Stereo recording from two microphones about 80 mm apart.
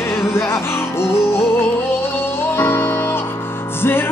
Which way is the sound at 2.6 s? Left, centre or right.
Left.